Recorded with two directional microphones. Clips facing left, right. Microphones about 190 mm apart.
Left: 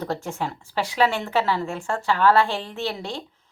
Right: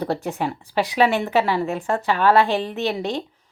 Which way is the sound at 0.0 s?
15° right (ahead or behind).